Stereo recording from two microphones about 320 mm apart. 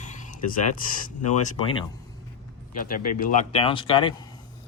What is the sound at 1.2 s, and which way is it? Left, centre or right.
Speech, left.